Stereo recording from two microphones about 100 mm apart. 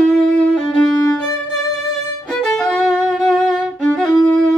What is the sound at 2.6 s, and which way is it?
Violin, 5° left (ahead or behind).